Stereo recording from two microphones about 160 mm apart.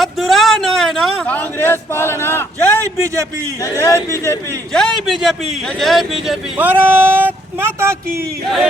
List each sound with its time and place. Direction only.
0.0 s a sound: centre (ahead or behind)
3.6 s speech: 20° left (ahead or behind)
4.7 s a man's voice: 5° left (ahead or behind)
6.6 s a man's voice: 10° right (ahead or behind)